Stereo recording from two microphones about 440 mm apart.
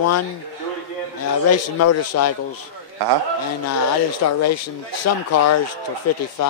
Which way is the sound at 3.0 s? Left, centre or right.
Right.